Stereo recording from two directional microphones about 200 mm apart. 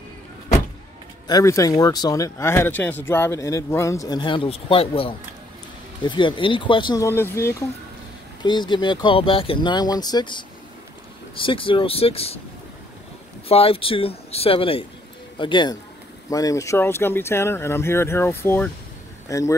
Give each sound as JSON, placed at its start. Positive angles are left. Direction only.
{"t": 1.2, "sound": "speech", "side_deg": 15}
{"t": 8.4, "sound": "speech", "side_deg": 20}
{"t": 13.5, "sound": "speech", "side_deg": 30}